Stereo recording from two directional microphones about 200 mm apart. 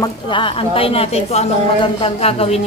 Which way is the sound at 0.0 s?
25° left (ahead or behind).